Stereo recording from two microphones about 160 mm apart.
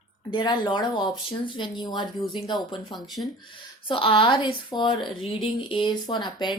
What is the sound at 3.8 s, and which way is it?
A woman's voice, 30° left (ahead or behind).